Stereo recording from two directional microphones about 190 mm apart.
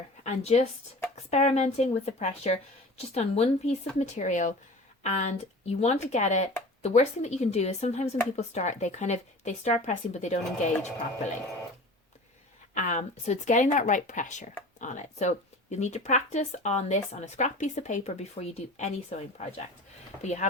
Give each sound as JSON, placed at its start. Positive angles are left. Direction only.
{"t": 0.3, "sound": "speech", "side_deg": 35}
{"t": 12.7, "sound": "speech", "side_deg": 40}